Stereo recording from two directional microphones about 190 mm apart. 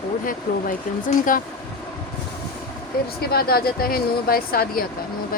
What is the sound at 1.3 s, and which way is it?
Speech, 45° left (ahead or behind).